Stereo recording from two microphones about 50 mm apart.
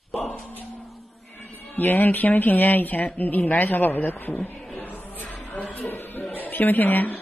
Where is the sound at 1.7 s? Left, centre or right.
Left.